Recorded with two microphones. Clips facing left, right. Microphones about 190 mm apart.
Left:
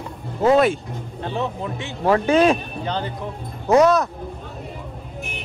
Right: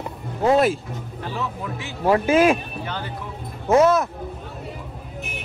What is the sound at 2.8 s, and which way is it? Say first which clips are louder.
Speech: left 5 dB; 20° left (ahead or behind).